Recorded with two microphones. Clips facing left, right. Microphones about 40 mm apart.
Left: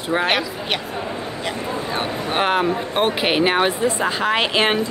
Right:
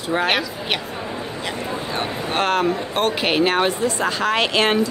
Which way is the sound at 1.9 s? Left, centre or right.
Centre.